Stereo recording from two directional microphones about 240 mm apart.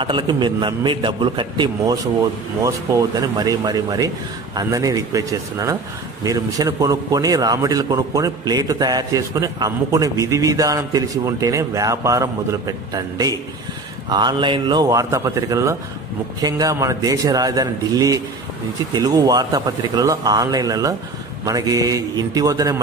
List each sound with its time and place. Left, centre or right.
0.0 s a man's voice: centre